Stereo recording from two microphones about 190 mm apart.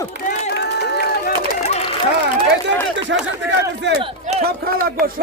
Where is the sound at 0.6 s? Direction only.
60° left (ahead or behind).